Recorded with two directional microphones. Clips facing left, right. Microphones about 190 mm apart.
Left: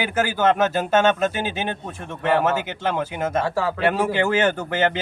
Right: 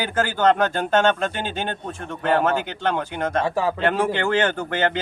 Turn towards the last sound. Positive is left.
turn(degrees=10)  # may be behind; listen again after turning